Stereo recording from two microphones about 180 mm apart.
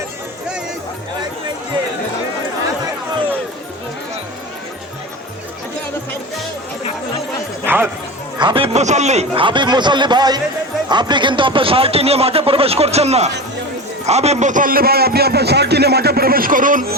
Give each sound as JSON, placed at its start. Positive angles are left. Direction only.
{"t": 7.6, "sound": "music", "side_deg": -10}
{"t": 8.4, "sound": "speech", "side_deg": -30}